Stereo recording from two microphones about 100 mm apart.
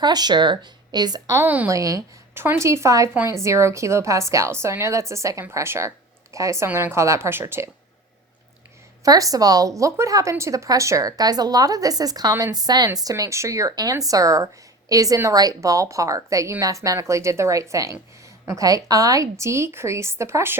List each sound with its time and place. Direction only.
0.0 s speech: 45° right (ahead or behind)
1.5 s speech: 15° right (ahead or behind)
1.7 s a woman's voice: 35° right (ahead or behind)
6.7 s a woman's voice: 20° right (ahead or behind)
9.0 s a woman's voice: 35° right (ahead or behind)